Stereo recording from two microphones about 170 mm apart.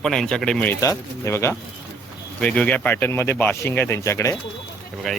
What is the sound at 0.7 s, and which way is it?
Speech, 15° left (ahead or behind).